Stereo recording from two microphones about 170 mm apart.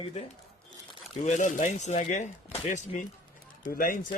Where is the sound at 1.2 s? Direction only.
45° left (ahead or behind).